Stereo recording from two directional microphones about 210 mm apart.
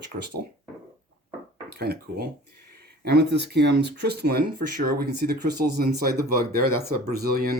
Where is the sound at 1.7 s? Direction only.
45° right (ahead or behind).